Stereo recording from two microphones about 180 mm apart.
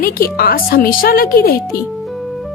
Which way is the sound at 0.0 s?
55° left (ahead or behind).